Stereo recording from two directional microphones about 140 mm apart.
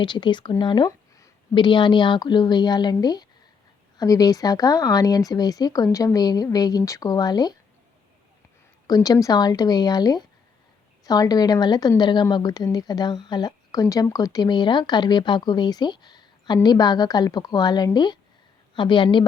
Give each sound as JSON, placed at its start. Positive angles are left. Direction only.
{"t": 0.0, "sound": "speech", "side_deg": 35}
{"t": 9.0, "sound": "speech", "side_deg": 25}